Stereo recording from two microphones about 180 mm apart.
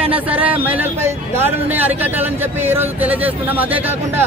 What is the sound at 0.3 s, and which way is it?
Speech, 10° right (ahead or behind).